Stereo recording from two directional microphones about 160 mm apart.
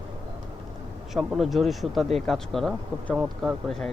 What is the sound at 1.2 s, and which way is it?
Speech, centre (ahead or behind).